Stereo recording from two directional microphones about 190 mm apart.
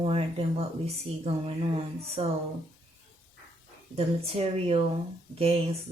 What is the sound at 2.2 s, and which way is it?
Speech, 35° right (ahead or behind).